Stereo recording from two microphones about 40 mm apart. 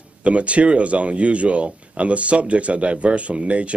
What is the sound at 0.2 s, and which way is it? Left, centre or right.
Speech, right.